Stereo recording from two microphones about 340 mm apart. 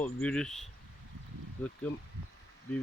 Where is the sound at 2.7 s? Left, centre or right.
Centre.